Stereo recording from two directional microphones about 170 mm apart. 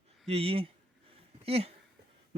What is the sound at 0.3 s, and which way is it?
A man's voice, 35° right (ahead or behind).